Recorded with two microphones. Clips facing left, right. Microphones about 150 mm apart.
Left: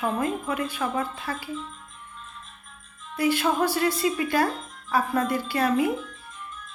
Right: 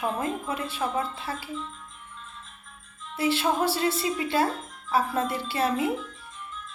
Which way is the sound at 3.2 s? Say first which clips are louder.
Left 2 dB; 25° right (ahead or behind).